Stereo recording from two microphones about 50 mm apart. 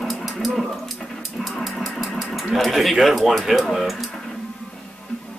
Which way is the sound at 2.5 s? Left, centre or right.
Centre.